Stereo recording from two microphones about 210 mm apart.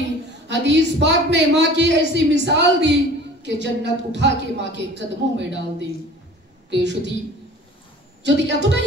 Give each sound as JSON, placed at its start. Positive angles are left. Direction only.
{"t": 0.5, "sound": "a man's voice", "side_deg": -55}
{"t": 8.2, "sound": "a man's voice", "side_deg": -55}